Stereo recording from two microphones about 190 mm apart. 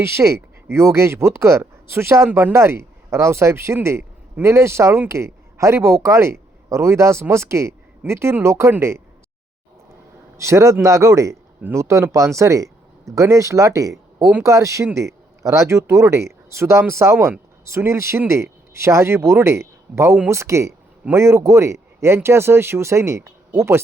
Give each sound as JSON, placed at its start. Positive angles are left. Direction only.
{"t": 0.0, "sound": "speech", "side_deg": -15}
{"t": 10.3, "sound": "speech", "side_deg": -15}